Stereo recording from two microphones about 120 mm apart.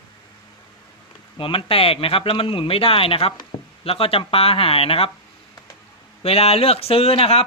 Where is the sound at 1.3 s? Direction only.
50° left (ahead or behind).